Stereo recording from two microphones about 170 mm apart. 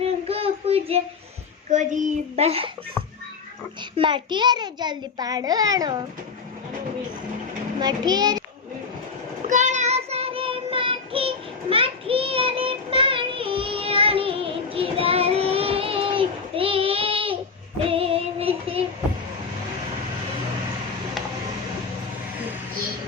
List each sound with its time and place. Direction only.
0.0 s child singing: 35° right (ahead or behind)
1.7 s a child's voice: 45° right (ahead or behind)
3.9 s a child's voice: 30° right (ahead or behind)
7.8 s a child's voice: 25° right (ahead or behind)
9.5 s child singing: 45° right (ahead or behind)
17.8 s music: 35° right (ahead or behind)